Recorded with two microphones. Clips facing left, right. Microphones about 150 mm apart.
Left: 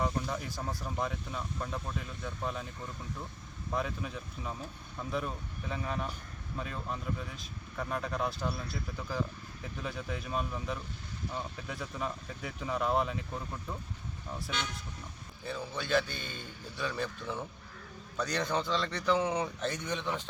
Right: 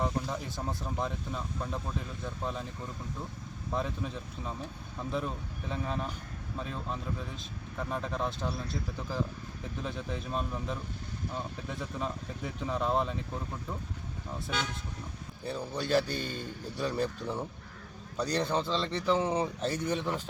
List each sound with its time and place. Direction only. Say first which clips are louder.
0.0 s speech: right 1 dB; centre (ahead or behind)
2.2 s speech: even; centre (ahead or behind)
3.7 s speech: right 1 dB; centre (ahead or behind)
15.4 s a man's voice: right 3 dB; 35° right (ahead or behind)
19.9 s a man's voice: right 3 dB; 5° right (ahead or behind)